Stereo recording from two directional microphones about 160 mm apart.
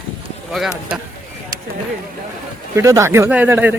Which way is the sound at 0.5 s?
Centre (ahead or behind).